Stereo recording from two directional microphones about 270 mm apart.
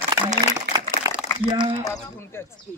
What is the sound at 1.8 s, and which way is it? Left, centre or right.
Speech, centre.